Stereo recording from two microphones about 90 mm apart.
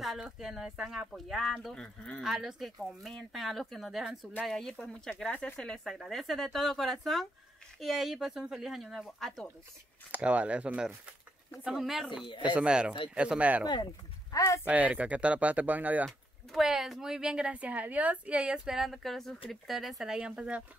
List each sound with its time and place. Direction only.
0.0 s speech: 5° right (ahead or behind)
2.2 s speech: 5° right (ahead or behind)
10.1 s a woman's voice: 15° right (ahead or behind)
11.6 s a woman's voice: 5° right (ahead or behind)
14.3 s speech: 40° left (ahead or behind)
14.6 s a woman's voice: 15° right (ahead or behind)
16.1 s a woman's voice: centre (ahead or behind)